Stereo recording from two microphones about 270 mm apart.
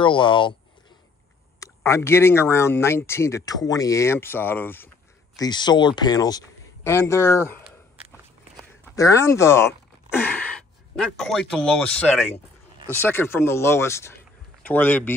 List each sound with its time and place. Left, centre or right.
0.0 s speech: centre
1.6 s speech: centre
8.8 s speech: centre